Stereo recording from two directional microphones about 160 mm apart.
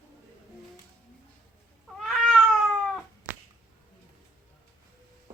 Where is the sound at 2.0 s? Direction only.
Centre (ahead or behind).